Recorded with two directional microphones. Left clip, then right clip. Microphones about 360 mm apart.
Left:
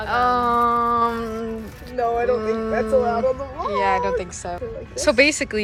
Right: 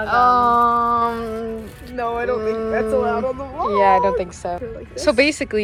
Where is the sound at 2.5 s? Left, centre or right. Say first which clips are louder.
Right 2 dB; centre.